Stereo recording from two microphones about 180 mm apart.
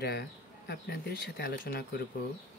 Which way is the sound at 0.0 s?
65° left (ahead or behind).